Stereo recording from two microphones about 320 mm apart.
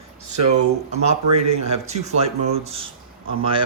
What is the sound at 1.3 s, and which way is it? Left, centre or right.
Speech, centre.